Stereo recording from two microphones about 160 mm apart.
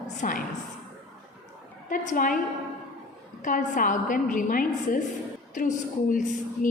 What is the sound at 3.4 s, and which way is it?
A woman's voice, 55° left (ahead or behind).